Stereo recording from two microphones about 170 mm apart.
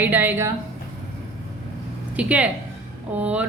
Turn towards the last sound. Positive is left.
turn(degrees=-10)  # may be behind; listen again after turning